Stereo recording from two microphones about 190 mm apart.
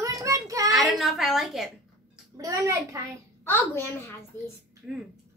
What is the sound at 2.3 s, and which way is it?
Speech, 15° right (ahead or behind).